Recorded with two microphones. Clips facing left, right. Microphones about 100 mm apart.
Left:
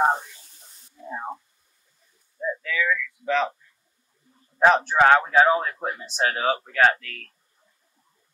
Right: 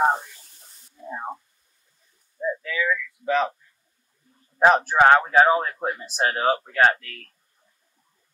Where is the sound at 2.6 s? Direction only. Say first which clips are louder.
Even; 20° right (ahead or behind).